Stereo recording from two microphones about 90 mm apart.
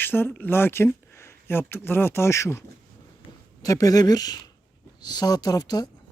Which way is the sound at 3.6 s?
40° left (ahead or behind).